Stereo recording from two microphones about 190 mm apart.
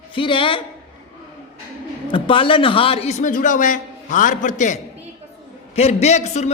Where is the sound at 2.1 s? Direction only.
25° left (ahead or behind).